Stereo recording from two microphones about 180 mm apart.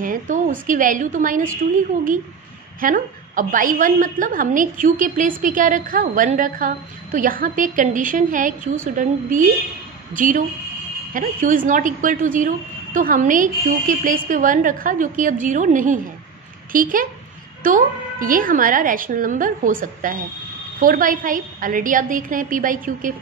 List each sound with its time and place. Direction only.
0.0 s a sound: 50° right (ahead or behind)
0.7 s a woman's voice: 50° right (ahead or behind)
2.8 s a woman's voice: 50° right (ahead or behind)